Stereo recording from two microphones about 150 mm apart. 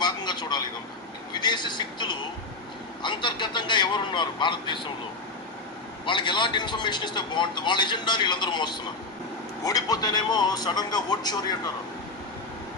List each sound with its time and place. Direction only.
0.0 s a sound: 30° left (ahead or behind)
1.3 s a man's voice: 30° left (ahead or behind)
6.1 s a man's voice: 30° left (ahead or behind)